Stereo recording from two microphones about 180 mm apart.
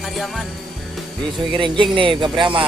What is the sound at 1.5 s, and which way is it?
Speech, 25° right (ahead or behind).